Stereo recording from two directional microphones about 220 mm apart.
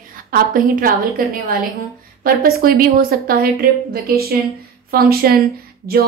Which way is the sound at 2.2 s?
40° right (ahead or behind).